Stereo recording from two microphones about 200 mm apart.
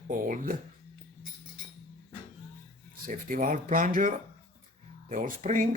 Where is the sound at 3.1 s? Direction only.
40° right (ahead or behind).